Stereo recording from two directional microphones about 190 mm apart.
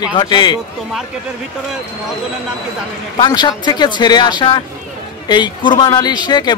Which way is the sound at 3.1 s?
25° left (ahead or behind).